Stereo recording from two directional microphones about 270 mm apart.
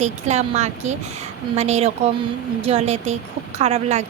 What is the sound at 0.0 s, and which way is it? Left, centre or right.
A woman's voice, right.